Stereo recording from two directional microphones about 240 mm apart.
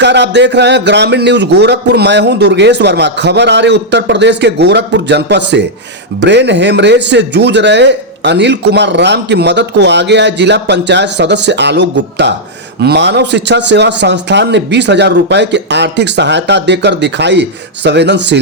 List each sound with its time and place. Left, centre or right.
0.0 s speech: right